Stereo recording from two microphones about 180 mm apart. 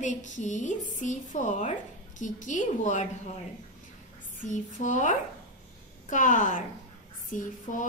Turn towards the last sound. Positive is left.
turn(degrees=45)  # may be behind; listen again after turning